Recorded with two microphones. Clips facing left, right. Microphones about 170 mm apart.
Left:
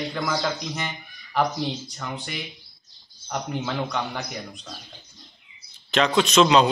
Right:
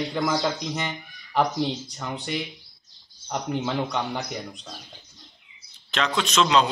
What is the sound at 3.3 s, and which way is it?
Speech, 20° right (ahead or behind).